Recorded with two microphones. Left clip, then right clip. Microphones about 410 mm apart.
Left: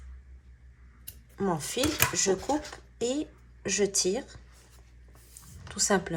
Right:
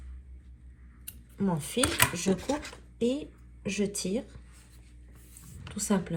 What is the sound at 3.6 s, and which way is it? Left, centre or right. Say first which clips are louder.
Speech: left 5 dB; left.